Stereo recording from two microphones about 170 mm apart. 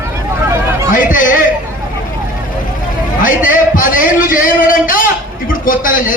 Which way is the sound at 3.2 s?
50° left (ahead or behind).